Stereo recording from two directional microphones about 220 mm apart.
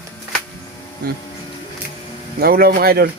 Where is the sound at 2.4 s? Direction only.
45° right (ahead or behind).